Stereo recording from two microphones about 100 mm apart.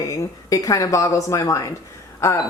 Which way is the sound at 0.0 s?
35° left (ahead or behind).